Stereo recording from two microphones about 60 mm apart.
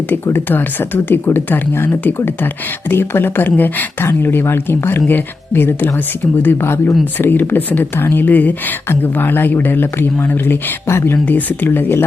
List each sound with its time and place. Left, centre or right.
0.3 s speech: left
7.0 s speech: left
11.3 s speech: left